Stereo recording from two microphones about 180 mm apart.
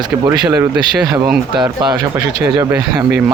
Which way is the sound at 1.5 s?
25° right (ahead or behind).